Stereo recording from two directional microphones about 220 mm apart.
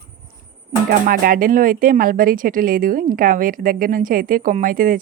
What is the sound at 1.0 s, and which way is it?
A woman's voice, 40° right (ahead or behind).